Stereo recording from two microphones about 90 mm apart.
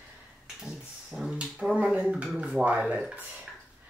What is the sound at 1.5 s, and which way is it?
Speech, 10° right (ahead or behind).